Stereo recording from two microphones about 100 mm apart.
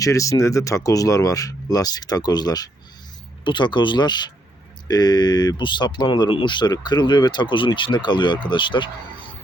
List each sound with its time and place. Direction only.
0.0 s speech: 35° left (ahead or behind); by 8.9 s 50° left (ahead or behind)